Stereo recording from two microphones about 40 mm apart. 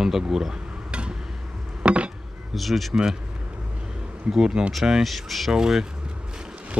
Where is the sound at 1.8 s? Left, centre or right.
Right.